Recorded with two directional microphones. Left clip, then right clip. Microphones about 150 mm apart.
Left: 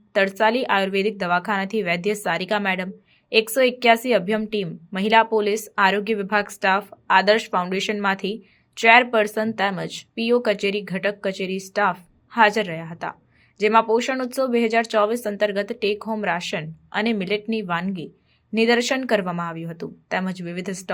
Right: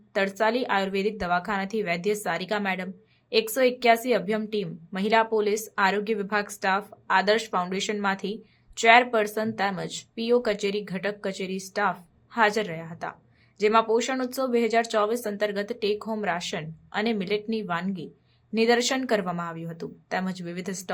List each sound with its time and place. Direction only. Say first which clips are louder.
0.1 s a woman's voice: left 5 dB; 30° left (ahead or behind)